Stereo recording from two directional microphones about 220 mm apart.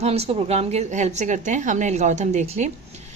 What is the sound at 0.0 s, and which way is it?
A woman's voice, 30° right (ahead or behind).